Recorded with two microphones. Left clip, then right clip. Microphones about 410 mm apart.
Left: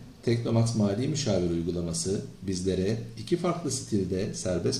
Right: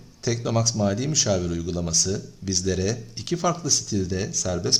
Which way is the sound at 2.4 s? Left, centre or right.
Right.